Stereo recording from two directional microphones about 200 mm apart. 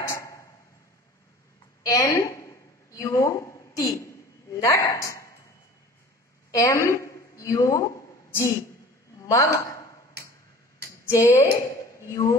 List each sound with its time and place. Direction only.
0.0 s tick-tock: 15° left (ahead or behind)
1.8 s a sound: 15° left (ahead or behind)
4.6 s a woman's voice: 15° left (ahead or behind)
6.5 s a sound: 15° left (ahead or behind)
9.3 s a woman's voice: 15° left (ahead or behind)
11.1 s a woman's voice: 15° left (ahead or behind)